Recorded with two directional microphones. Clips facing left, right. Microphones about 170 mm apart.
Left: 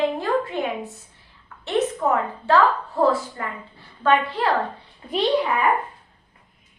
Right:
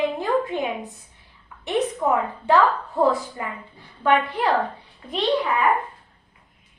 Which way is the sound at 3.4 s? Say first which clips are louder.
Even; 15° right (ahead or behind).